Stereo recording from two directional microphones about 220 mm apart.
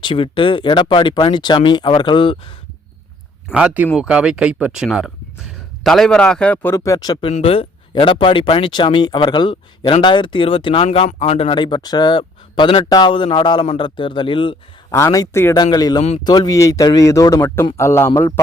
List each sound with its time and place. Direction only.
0.0 s speech: 20° left (ahead or behind)
3.5 s speech: 5° right (ahead or behind); by 18.3 s 15° left (ahead or behind)